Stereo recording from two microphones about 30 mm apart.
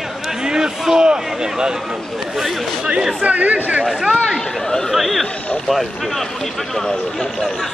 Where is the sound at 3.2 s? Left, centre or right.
Right.